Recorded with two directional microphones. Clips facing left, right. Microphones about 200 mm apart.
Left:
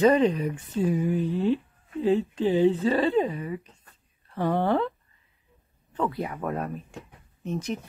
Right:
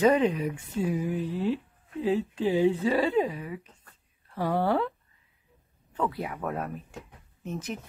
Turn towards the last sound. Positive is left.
turn(degrees=-5)  # may be behind; listen again after turning